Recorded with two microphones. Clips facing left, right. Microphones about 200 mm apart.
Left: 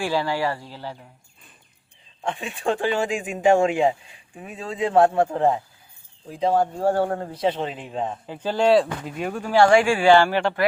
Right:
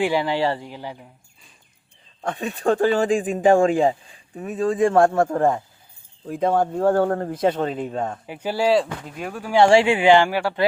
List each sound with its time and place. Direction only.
0.0 s speech: 20° right (ahead or behind)
2.2 s speech: 40° right (ahead or behind)
8.3 s speech: 10° right (ahead or behind)
9.5 s speech: 25° right (ahead or behind)